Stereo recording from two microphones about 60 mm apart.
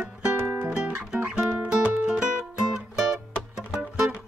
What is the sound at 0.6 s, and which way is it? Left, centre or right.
Music, centre.